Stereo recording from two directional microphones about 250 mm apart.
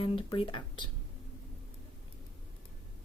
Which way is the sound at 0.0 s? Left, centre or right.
Left.